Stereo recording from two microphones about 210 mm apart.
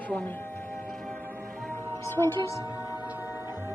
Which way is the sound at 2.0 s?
10° left (ahead or behind).